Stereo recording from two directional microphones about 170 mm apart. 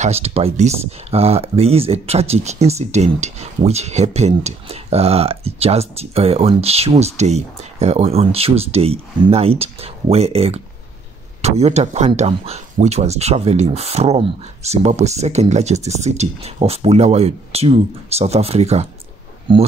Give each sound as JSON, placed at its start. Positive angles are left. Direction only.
{"t": 0.0, "sound": "speech", "side_deg": -35}